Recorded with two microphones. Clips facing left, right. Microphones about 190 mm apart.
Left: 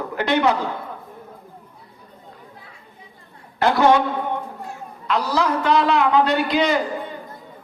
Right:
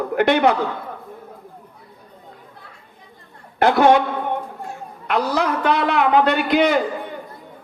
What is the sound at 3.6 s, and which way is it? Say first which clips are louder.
Speech: right 2 dB; 55° right (ahead or behind).